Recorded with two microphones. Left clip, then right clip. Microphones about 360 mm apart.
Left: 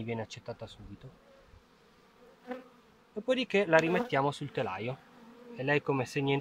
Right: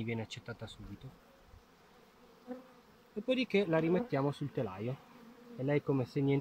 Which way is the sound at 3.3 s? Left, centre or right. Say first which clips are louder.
Left 3 dB; left.